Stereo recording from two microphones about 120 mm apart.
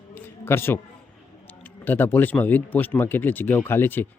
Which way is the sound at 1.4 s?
15° left (ahead or behind).